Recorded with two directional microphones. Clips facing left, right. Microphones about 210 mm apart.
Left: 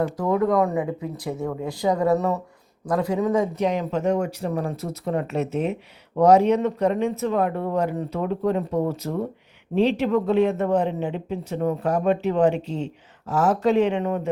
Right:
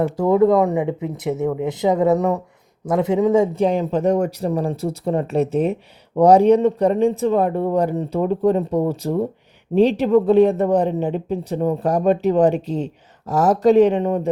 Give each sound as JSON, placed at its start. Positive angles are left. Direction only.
{"t": 0.0, "sound": "speech", "side_deg": -30}